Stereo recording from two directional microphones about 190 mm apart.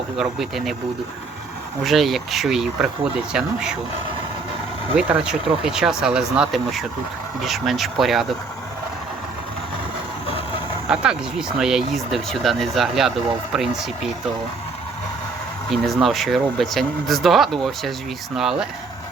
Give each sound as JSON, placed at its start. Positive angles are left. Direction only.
{"t": 0.2, "sound": "speech", "side_deg": 0}
{"t": 1.8, "sound": "speech", "side_deg": 0}
{"t": 4.9, "sound": "speech", "side_deg": -5}
{"t": 10.2, "sound": "a sound", "side_deg": 30}
{"t": 10.8, "sound": "speech", "side_deg": -5}
{"t": 15.7, "sound": "speech", "side_deg": 0}